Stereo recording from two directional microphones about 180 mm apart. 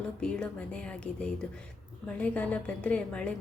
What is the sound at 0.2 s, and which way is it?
A woman's voice, 5° left (ahead or behind).